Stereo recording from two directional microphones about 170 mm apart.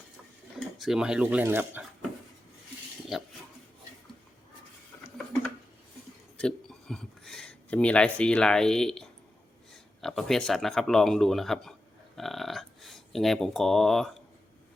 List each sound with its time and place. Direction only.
0.8 s speech: 5° right (ahead or behind)
3.1 s speech: centre (ahead or behind)
6.4 s a sound: 5° left (ahead or behind)
9.7 s speech: centre (ahead or behind)
12.1 s burping: centre (ahead or behind)